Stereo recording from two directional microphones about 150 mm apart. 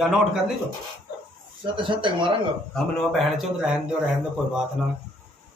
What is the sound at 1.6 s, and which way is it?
Speech, 35° right (ahead or behind).